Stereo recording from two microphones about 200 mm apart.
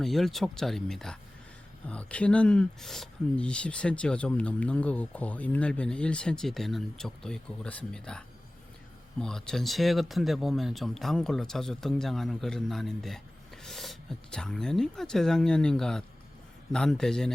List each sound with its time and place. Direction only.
0.0 s speech: centre (ahead or behind)
9.2 s speech: 5° left (ahead or behind)